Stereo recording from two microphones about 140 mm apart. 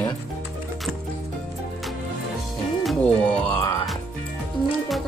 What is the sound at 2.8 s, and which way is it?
Music, centre (ahead or behind).